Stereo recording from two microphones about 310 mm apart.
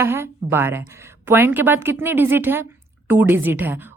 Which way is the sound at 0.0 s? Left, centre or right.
Centre.